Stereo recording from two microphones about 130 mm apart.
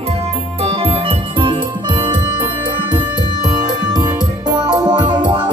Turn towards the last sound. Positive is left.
turn(degrees=-35)  # may be behind; listen again after turning